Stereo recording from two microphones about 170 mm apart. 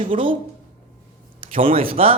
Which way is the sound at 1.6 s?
35° right (ahead or behind).